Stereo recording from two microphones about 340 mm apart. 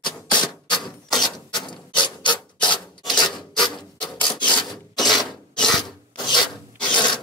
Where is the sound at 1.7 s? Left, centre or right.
Centre.